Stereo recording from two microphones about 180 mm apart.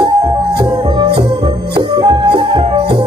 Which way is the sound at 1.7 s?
30° right (ahead or behind).